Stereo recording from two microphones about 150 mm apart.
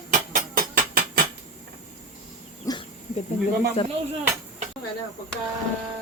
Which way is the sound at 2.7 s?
25° left (ahead or behind).